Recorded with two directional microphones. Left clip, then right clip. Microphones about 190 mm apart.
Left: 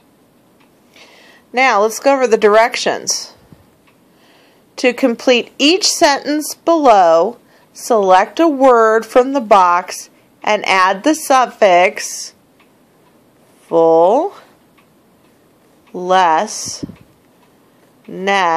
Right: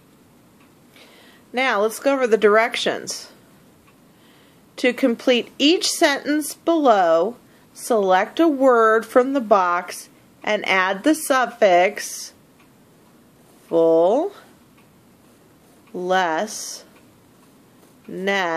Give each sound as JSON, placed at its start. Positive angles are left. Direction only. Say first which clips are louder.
{"t": 0.9, "sound": "speech", "louder": "left 6 dB", "side_deg": 20}
{"t": 4.7, "sound": "a woman's voice", "louder": "left 5 dB", "side_deg": 20}
{"t": 13.7, "sound": "speech", "louder": "left 6 dB", "side_deg": 15}
{"t": 15.9, "sound": "a woman's voice", "louder": "left 8 dB", "side_deg": 20}
{"t": 18.1, "sound": "a woman's voice", "louder": "left 7 dB", "side_deg": 20}